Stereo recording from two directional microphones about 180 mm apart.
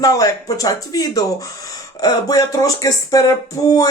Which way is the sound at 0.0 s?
20° left (ahead or behind).